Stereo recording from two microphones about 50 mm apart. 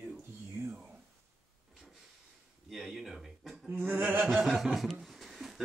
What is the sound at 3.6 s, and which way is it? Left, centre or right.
Speech, right.